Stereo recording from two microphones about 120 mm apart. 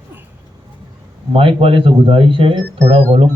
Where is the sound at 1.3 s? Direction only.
50° right (ahead or behind).